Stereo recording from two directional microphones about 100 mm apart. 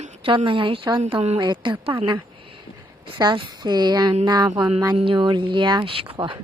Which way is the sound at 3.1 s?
55° right (ahead or behind).